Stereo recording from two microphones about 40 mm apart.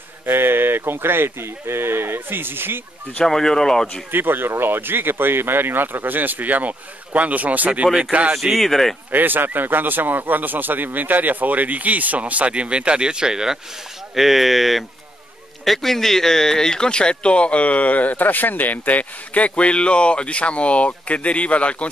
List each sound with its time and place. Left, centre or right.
0.3 s speech: right
3.3 s speech: centre
4.1 s speech: right
7.8 s speech: right
8.5 s speech: centre
9.1 s speech: right; by 13.6 s centre
14.1 s speech: centre; by 21.8 s left